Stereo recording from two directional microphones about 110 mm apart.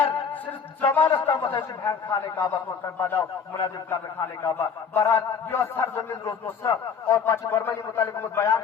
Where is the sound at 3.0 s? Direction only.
20° left (ahead or behind).